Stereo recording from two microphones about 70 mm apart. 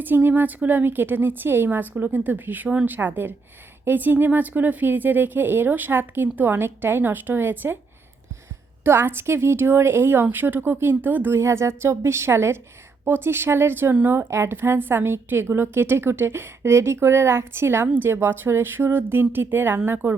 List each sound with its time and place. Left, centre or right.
0.0 s speech: right
8.8 s a woman's voice: right
11.3 s a woman's voice: right